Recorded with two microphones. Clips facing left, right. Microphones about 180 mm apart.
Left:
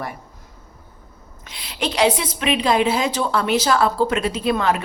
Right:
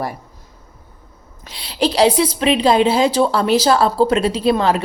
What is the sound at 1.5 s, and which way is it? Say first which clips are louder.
A woman's voice: right 7 dB; 30° right (ahead or behind).